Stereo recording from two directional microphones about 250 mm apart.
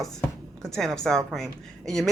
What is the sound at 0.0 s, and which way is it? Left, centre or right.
Speech, centre.